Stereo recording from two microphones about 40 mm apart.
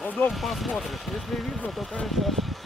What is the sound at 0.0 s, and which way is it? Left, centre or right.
Speech, left.